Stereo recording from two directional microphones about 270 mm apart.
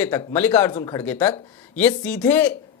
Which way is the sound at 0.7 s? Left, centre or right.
Centre.